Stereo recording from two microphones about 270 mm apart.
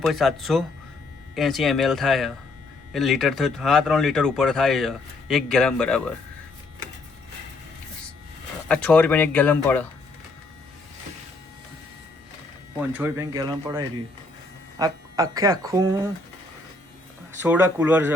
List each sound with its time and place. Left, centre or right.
0.0 s speech: centre
8.6 s speech: centre
12.9 s speech: centre
17.4 s speech: centre